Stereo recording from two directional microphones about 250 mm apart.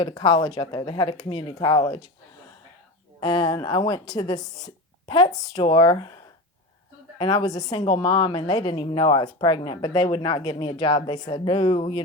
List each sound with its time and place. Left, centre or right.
0.0 s speech: centre
3.2 s speech: centre
7.2 s a woman's voice: centre